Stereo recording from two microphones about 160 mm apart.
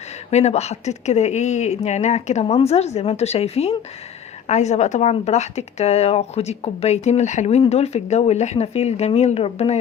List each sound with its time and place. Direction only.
0.3 s speech: 45° left (ahead or behind)